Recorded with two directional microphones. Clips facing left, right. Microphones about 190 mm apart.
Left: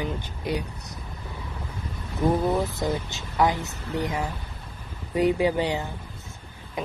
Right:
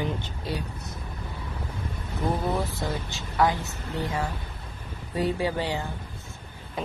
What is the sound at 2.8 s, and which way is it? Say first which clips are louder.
Speech: left 4 dB; 20° left (ahead or behind).